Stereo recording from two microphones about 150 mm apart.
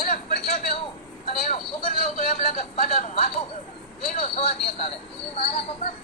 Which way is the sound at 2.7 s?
45° left (ahead or behind).